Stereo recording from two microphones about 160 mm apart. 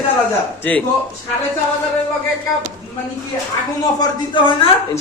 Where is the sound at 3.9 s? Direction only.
30° left (ahead or behind).